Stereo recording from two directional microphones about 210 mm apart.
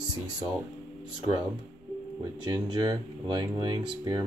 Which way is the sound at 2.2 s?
20° right (ahead or behind).